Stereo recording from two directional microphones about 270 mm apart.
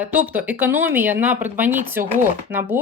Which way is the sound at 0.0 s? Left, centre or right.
Centre.